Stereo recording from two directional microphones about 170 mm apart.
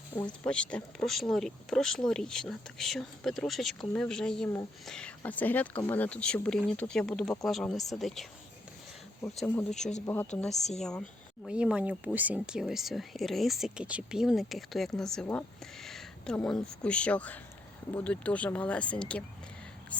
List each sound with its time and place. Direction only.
0.4 s speech: 5° left (ahead or behind)
9.7 s a woman's voice: 45° left (ahead or behind)
11.4 s speech: 5° right (ahead or behind)